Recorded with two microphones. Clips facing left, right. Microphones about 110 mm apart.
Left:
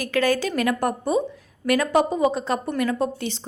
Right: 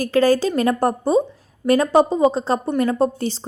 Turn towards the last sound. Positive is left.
turn(degrees=-35)  # may be behind; listen again after turning